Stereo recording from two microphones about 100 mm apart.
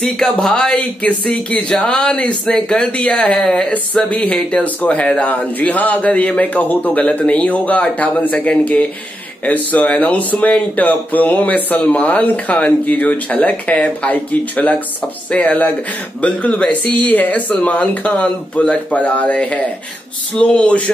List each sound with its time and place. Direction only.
0.0 s speech: 5° left (ahead or behind)